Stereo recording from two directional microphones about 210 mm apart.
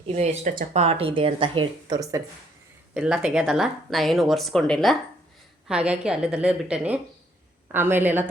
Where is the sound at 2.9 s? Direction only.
5° right (ahead or behind).